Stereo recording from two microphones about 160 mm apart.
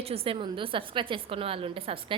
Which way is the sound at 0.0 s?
35° right (ahead or behind).